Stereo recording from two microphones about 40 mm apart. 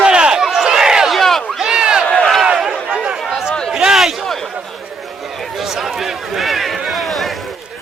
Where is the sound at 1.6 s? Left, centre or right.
Centre.